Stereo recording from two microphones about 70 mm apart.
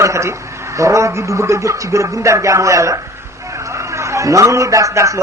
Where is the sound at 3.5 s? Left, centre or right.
Right.